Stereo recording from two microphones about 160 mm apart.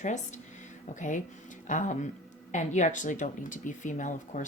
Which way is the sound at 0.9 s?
50° left (ahead or behind).